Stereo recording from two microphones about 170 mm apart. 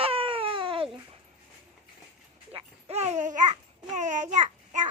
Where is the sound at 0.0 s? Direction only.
35° right (ahead or behind).